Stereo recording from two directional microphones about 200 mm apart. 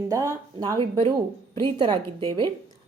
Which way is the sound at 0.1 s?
15° right (ahead or behind).